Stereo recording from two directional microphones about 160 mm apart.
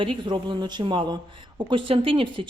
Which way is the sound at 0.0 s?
30° right (ahead or behind).